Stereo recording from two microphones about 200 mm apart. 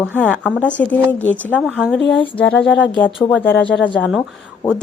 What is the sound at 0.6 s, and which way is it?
Speech, 5° left (ahead or behind).